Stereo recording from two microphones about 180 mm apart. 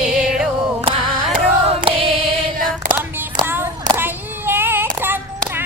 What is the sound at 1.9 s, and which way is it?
Choir, 30° right (ahead or behind).